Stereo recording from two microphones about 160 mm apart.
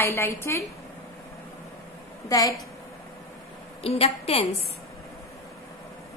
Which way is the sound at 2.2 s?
25° left (ahead or behind).